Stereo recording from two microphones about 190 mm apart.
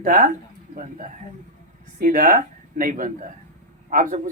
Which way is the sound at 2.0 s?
45° right (ahead or behind).